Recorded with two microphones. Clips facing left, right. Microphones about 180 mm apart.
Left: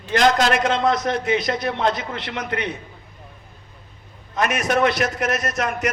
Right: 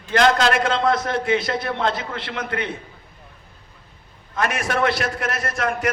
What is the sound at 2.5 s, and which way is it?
Speech, 25° right (ahead or behind).